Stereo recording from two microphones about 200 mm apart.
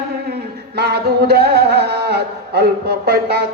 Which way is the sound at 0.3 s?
50° right (ahead or behind).